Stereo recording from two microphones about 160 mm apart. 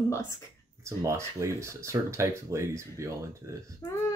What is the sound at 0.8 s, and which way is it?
Speech, 20° right (ahead or behind).